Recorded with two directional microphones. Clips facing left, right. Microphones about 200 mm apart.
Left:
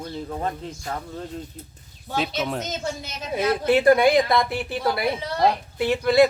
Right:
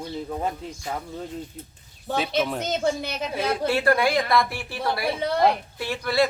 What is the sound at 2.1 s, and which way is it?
Speech, centre (ahead or behind).